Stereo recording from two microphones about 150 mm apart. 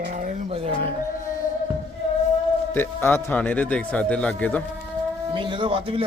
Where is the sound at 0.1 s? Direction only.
60° right (ahead or behind).